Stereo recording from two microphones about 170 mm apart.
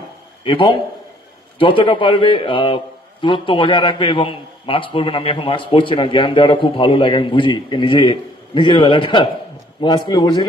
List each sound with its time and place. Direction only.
0.4 s a man's voice: 30° left (ahead or behind)